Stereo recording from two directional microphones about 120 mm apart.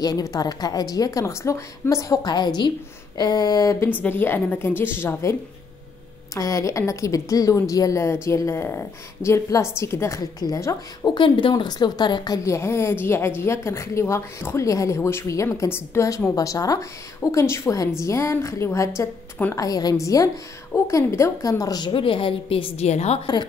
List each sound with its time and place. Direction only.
0.0 s a woman's voice: 30° left (ahead or behind)
4.0 s a woman's voice: 15° left (ahead or behind)
6.3 s a woman's voice: 25° left (ahead or behind)
11.1 s a woman's voice: 45° left (ahead or behind)
12.4 s a woman's voice: 20° left (ahead or behind); by 22.8 s 50° left (ahead or behind)
22.8 s a woman's voice: 65° left (ahead or behind)